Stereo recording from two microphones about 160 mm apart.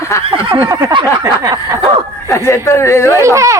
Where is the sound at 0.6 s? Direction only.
20° right (ahead or behind).